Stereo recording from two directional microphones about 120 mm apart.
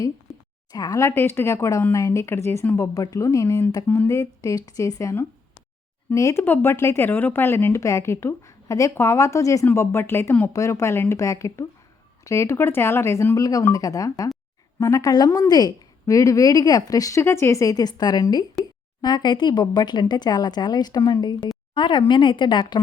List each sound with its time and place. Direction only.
0.7 s speech: 30° left (ahead or behind)